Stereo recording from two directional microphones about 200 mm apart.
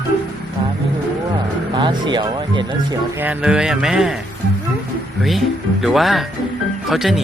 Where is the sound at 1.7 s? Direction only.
20° right (ahead or behind).